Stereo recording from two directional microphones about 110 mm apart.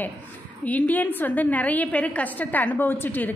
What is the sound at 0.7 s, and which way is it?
A woman's voice, 15° left (ahead or behind).